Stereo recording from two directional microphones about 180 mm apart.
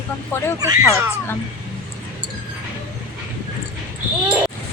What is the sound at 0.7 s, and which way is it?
Speech, 15° right (ahead or behind).